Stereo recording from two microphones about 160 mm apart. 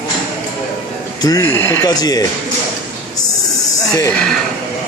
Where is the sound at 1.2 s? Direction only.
20° left (ahead or behind).